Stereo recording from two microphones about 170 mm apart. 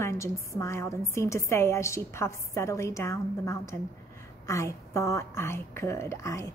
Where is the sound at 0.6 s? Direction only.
15° left (ahead or behind).